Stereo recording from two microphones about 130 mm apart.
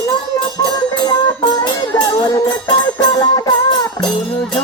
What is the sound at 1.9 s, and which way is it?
Speech, 25° left (ahead or behind).